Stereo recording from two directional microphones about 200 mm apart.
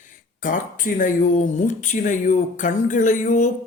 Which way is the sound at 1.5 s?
40° left (ahead or behind).